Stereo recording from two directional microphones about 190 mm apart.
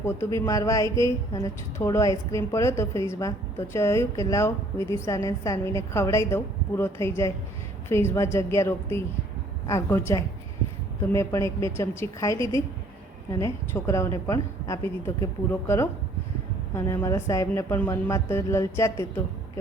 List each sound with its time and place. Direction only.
0.0 s a woman's voice: 15° left (ahead or behind)